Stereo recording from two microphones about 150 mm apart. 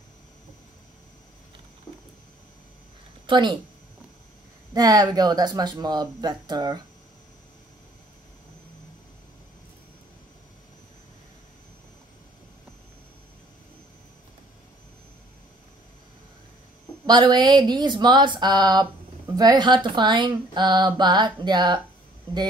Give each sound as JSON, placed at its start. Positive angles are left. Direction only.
{"t": 3.3, "sound": "a woman's voice", "side_deg": -30}
{"t": 4.7, "sound": "speech", "side_deg": -25}
{"t": 17.0, "sound": "speech", "side_deg": -30}